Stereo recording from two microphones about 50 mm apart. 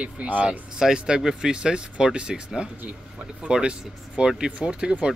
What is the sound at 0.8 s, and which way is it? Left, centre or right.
Speech, centre.